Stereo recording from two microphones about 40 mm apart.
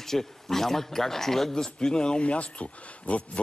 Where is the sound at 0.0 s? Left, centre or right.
Centre.